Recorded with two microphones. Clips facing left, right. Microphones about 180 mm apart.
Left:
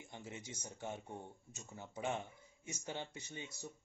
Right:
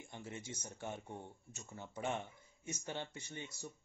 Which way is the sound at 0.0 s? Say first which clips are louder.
Right 1 dB; 15° left (ahead or behind).